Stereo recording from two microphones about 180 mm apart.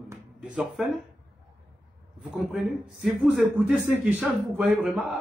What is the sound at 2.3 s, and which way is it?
A man's voice, centre (ahead or behind).